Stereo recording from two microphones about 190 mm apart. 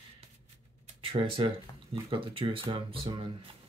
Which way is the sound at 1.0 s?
30° right (ahead or behind).